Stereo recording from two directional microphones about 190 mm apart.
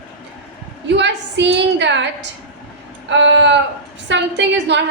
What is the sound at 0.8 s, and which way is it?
A woman's voice, 65° right (ahead or behind).